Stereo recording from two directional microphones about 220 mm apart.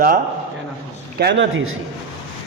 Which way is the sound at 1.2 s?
50° right (ahead or behind).